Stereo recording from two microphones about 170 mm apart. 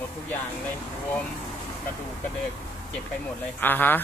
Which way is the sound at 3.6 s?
10° left (ahead or behind).